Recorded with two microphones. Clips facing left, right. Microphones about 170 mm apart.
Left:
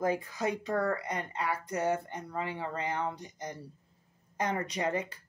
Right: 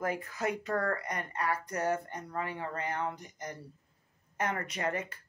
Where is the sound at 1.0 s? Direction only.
25° left (ahead or behind).